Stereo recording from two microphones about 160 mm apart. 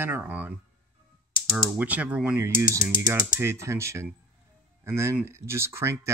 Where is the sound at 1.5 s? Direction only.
5° right (ahead or behind).